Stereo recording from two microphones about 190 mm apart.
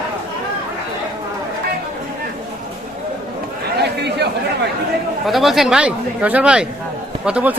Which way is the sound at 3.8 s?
60° right (ahead or behind).